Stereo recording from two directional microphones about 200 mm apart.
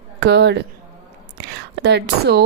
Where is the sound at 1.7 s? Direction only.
55° right (ahead or behind).